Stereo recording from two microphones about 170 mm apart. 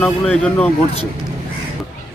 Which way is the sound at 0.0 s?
5° left (ahead or behind).